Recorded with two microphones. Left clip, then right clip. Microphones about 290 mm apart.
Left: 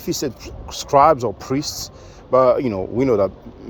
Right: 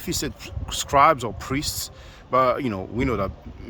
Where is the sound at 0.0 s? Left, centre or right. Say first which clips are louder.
Left 5 dB; centre.